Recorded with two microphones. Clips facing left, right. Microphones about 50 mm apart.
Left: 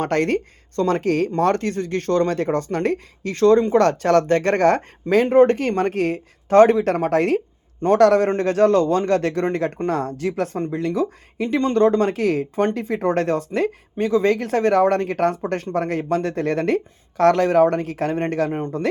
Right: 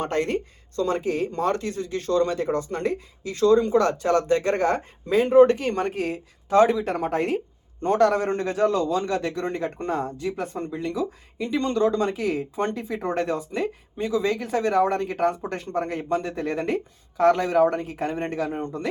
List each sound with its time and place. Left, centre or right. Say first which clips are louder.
0.0 s speech: left 5 dB; left
11.6 s speech: left 6 dB; left